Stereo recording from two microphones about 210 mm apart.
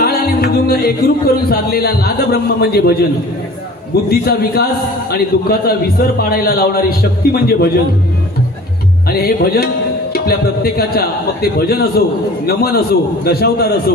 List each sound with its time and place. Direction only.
0.0 s music: 45° left (ahead or behind)
4.1 s music: 45° left (ahead or behind)
9.1 s music: 45° left (ahead or behind)